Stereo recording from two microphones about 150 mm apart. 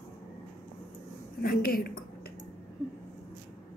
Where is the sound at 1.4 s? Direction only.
80° left.